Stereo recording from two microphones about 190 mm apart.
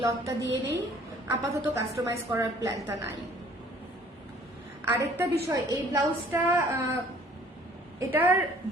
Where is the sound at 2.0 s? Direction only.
15° right (ahead or behind).